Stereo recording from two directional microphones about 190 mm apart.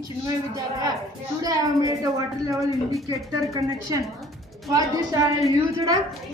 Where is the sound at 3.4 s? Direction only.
15° right (ahead or behind).